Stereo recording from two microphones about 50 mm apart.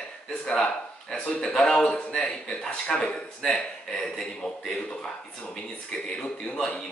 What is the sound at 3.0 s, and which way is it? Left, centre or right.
A man's voice, centre.